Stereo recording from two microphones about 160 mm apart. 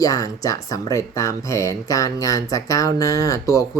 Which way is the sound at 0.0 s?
20° left (ahead or behind).